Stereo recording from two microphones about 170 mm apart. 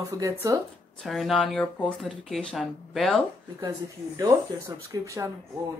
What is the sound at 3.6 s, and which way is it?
Speech, 20° right (ahead or behind).